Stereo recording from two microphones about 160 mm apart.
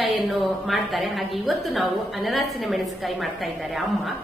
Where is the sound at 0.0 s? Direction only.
Centre (ahead or behind).